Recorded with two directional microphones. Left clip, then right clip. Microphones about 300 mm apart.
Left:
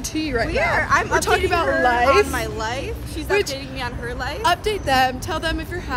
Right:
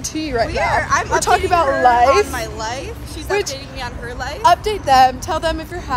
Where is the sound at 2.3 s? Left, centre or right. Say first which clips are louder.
Right 1 dB; centre.